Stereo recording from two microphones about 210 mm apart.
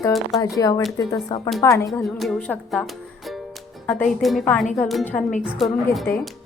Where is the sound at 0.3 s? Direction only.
15° left (ahead or behind).